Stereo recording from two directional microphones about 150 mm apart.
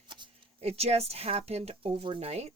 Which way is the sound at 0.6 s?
45° right (ahead or behind).